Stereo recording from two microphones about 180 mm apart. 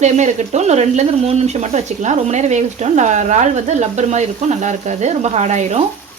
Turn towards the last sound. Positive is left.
turn(degrees=-40)  # may be behind; listen again after turning